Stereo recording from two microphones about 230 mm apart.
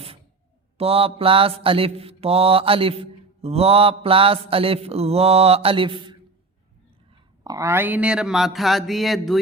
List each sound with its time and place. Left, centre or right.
0.8 s mantra: right
7.4 s speech: centre